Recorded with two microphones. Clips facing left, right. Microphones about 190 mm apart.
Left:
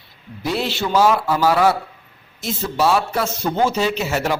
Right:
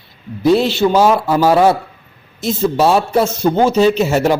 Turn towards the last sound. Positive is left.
turn(degrees=-25)  # may be behind; listen again after turning